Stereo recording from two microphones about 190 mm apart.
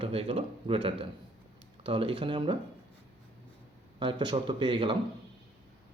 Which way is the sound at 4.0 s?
25° right (ahead or behind).